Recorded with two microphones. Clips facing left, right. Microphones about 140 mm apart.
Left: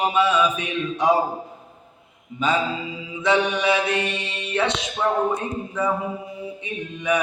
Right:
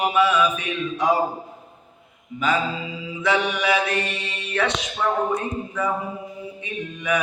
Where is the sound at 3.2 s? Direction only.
25° left (ahead or behind).